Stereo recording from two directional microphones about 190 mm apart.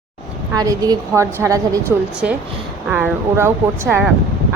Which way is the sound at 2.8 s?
10° right (ahead or behind).